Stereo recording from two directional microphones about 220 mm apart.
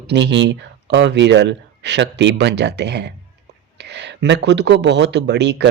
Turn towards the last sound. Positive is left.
turn(degrees=-50)  # may be behind; listen again after turning